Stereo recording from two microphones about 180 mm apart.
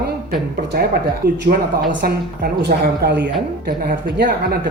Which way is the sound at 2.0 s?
60° right (ahead or behind).